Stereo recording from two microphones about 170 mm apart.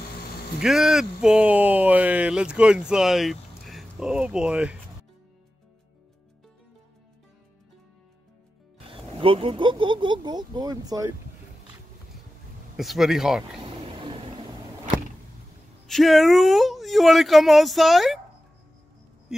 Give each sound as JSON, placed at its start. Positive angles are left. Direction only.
{"t": 0.6, "sound": "speech", "side_deg": 0}
{"t": 9.2, "sound": "speech", "side_deg": -30}
{"t": 12.7, "sound": "speech", "side_deg": 0}
{"t": 13.6, "sound": "vehicle", "side_deg": -30}
{"t": 15.9, "sound": "speech", "side_deg": 0}